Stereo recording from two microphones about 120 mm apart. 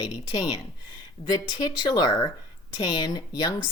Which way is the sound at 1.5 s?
35° left (ahead or behind).